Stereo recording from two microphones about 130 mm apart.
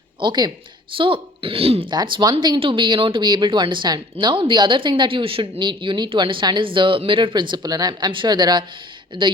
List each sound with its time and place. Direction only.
0.2 s speech: 35° right (ahead or behind)
1.9 s speech: 35° right (ahead or behind)